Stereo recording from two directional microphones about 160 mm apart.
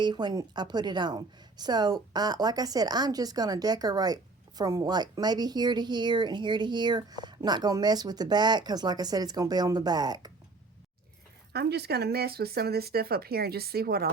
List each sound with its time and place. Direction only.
0.0 s a woman's voice: 30° right (ahead or behind)
11.5 s speech: 90° right; by 14.1 s 70° right (ahead or behind)